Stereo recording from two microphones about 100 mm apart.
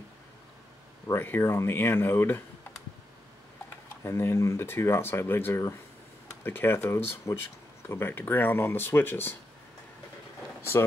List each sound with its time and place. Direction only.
1.0 s speech: 25° left (ahead or behind)
4.0 s speech: 25° left (ahead or behind)